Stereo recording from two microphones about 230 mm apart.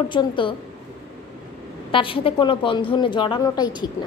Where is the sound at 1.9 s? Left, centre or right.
Left.